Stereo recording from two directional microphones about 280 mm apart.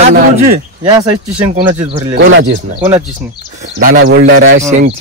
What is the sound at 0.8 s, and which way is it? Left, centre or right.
Speech, centre.